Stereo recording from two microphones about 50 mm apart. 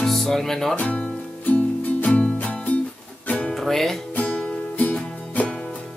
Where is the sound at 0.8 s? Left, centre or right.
Left.